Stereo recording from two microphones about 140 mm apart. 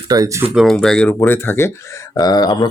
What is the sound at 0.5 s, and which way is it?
Speech, centre (ahead or behind).